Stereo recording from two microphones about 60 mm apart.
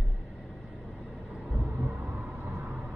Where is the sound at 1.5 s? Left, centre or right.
Right.